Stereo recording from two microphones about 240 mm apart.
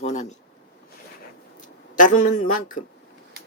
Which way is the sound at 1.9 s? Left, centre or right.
Left.